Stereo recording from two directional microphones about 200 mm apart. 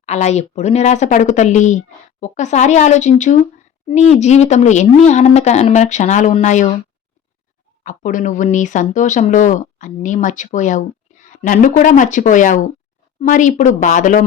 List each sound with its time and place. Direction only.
0.0 s speech: 35° left (ahead or behind)
7.9 s speech: 40° left (ahead or behind)